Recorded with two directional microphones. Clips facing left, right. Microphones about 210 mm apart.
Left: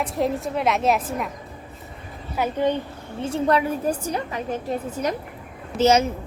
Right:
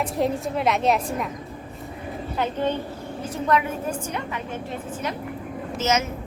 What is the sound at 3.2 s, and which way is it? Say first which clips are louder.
A woman's voice: left 3 dB; 30° left (ahead or behind).